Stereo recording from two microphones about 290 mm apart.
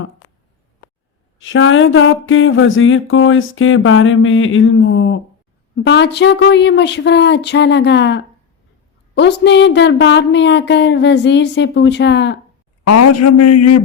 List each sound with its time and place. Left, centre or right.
1.4 s a sound: left
5.7 s speech: left
12.8 s a man's voice: left